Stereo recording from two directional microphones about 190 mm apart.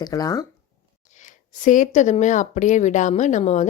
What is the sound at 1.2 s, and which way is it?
Speech, 40° left (ahead or behind).